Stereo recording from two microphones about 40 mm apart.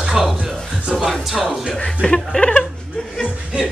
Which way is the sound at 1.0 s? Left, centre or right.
Centre.